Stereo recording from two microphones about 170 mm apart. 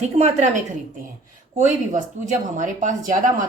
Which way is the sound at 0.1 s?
40° right (ahead or behind).